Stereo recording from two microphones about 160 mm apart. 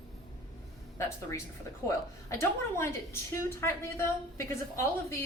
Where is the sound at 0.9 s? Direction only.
15° left (ahead or behind).